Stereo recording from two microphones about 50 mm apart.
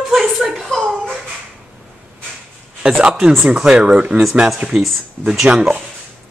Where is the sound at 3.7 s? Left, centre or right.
Right.